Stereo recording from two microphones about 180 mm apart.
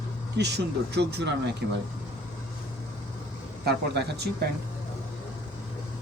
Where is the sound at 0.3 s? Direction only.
70° right (ahead or behind).